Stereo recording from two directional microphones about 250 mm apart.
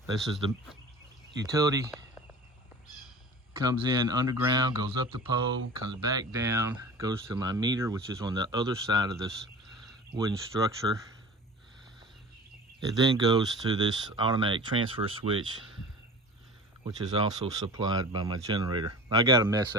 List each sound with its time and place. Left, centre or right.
1.5 s speech: centre
3.6 s speech: centre
10.2 s speech: centre
13.0 s speech: centre
16.8 s speech: centre